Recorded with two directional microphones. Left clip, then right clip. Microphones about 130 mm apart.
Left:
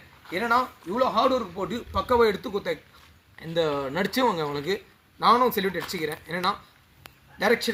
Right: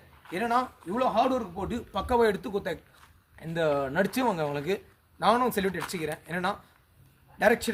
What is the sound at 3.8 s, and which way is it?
Speech, 45° right (ahead or behind).